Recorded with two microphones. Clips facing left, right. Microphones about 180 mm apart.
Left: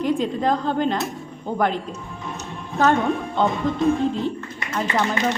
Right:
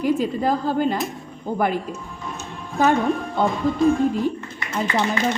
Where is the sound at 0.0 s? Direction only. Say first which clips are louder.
Right 1 dB; 5° right (ahead or behind).